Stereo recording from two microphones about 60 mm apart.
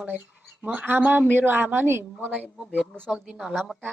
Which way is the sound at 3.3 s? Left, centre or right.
Centre.